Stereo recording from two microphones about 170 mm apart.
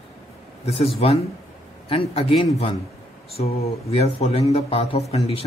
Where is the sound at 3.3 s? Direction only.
35° left (ahead or behind).